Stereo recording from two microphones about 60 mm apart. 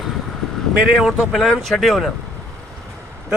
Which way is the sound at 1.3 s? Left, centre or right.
Centre.